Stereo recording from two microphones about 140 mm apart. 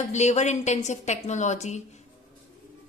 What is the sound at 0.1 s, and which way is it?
A woman's voice, 55° left (ahead or behind).